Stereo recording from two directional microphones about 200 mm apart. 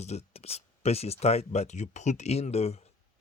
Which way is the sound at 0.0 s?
30° left (ahead or behind).